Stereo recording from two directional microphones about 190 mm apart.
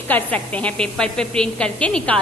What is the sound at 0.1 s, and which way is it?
A woman's voice, 10° left (ahead or behind).